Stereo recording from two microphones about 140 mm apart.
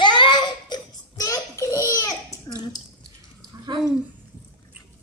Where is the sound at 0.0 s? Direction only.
35° left (ahead or behind).